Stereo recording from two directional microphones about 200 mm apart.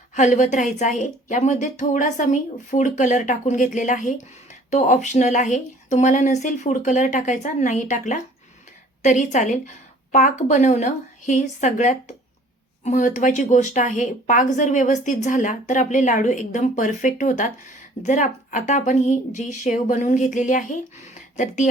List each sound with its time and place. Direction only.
0.1 s a woman's voice: 35° left (ahead or behind)